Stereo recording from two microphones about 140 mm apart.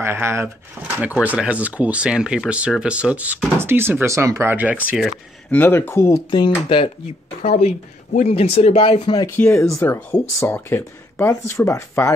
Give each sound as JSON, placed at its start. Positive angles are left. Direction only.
{"t": 0.0, "sound": "speech", "side_deg": -15}
{"t": 5.5, "sound": "speech", "side_deg": 15}
{"t": 6.3, "sound": "speech", "side_deg": 35}
{"t": 7.4, "sound": "a woman's voice", "side_deg": 50}
{"t": 9.2, "sound": "speech", "side_deg": 20}